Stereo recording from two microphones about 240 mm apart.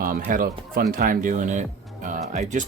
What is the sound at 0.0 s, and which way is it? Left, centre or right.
Speech, right.